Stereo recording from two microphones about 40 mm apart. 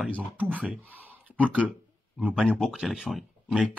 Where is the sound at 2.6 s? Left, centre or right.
Centre.